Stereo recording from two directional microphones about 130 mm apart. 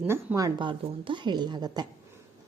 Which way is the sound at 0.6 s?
40° right (ahead or behind).